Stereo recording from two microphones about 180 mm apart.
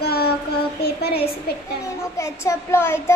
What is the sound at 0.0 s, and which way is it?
Child singing, 60° left (ahead or behind).